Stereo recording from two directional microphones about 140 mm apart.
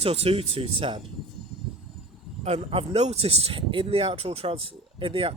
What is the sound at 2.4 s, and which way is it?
A man's voice, 45° right (ahead or behind).